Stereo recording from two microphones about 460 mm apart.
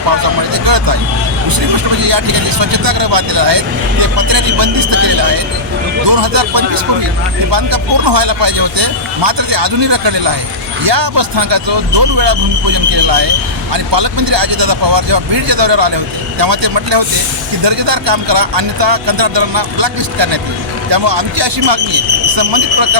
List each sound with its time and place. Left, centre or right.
0.2 s a sound: right
2.0 s speech: right
13.7 s speech: right